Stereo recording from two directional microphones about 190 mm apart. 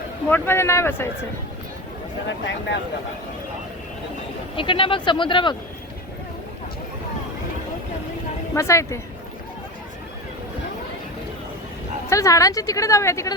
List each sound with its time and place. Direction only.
0.3 s a woman's voice: 10° left (ahead or behind)
2.2 s speech: 70° left (ahead or behind)
4.5 s speech: 25° left (ahead or behind)
8.5 s a woman's voice: 15° left (ahead or behind)
12.0 s a woman's voice: 15° left (ahead or behind)